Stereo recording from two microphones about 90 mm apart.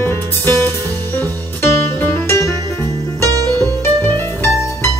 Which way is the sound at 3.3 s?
45° right (ahead or behind).